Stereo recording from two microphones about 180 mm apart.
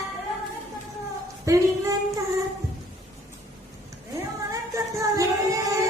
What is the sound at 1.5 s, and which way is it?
Speech, 15° right (ahead or behind).